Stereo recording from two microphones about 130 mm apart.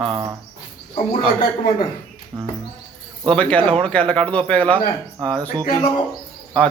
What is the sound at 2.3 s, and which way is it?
Music, 25° right (ahead or behind).